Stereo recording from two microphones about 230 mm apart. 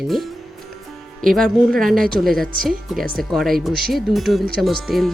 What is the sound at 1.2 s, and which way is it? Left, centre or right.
A woman's voice, centre.